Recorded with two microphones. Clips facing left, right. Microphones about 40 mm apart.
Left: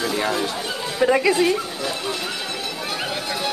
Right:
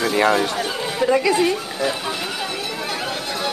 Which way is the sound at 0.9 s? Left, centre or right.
Centre.